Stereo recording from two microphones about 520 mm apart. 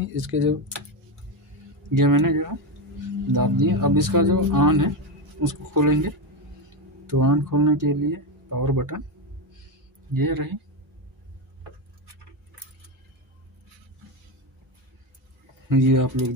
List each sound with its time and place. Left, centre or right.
0.0 s speech: right
2.0 s speech: right
10.1 s speech: right
15.7 s speech: right